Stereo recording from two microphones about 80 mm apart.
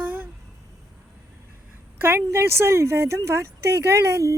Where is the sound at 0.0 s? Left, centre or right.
Right.